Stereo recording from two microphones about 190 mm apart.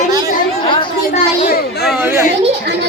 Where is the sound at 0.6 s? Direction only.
25° left (ahead or behind).